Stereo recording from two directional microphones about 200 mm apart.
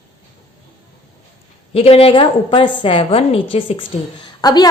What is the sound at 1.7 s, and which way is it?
A woman's voice, 30° left (ahead or behind).